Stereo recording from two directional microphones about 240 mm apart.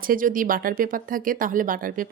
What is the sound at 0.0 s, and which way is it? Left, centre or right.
Speech, right.